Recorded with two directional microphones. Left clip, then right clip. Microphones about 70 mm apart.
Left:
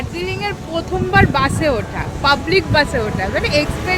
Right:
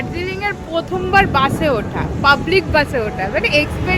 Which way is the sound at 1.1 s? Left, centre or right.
Centre.